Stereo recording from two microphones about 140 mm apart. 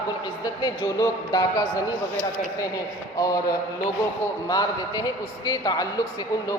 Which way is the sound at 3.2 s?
25° left (ahead or behind).